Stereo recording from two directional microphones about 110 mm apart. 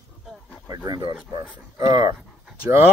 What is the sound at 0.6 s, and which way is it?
Speech, 40° right (ahead or behind).